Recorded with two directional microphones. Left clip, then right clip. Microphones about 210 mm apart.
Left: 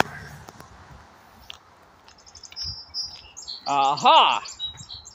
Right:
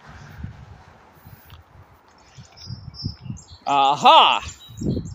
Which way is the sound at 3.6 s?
40° right (ahead or behind).